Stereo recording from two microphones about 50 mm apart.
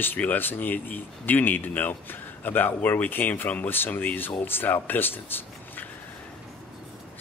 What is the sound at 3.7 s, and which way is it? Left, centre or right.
Speech, left.